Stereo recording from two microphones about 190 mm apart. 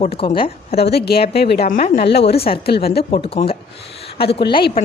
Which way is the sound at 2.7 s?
55° left (ahead or behind).